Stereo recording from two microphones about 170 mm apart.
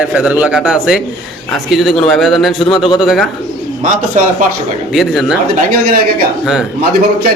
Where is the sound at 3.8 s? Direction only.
50° right (ahead or behind).